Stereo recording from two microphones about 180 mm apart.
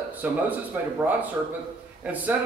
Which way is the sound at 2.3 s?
10° right (ahead or behind).